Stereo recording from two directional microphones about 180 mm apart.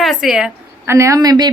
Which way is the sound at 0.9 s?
15° right (ahead or behind).